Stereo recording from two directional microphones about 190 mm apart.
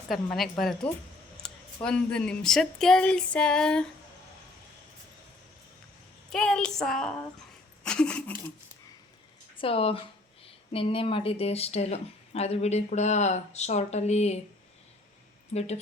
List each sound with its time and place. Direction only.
0.1 s speech: centre (ahead or behind)
6.3 s speech: 5° left (ahead or behind)
9.6 s speech: 30° left (ahead or behind)
15.5 s speech: 35° left (ahead or behind)